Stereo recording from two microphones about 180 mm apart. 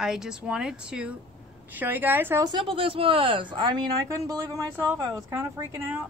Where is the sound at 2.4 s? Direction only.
25° right (ahead or behind).